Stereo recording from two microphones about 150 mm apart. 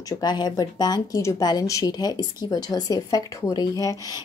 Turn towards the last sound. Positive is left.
turn(degrees=20)  # may be behind; listen again after turning